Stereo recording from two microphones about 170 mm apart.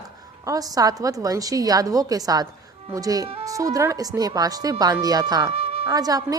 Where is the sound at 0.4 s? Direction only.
20° right (ahead or behind).